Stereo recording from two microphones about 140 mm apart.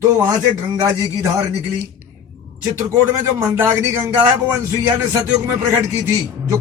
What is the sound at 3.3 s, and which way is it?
Speech, 15° right (ahead or behind).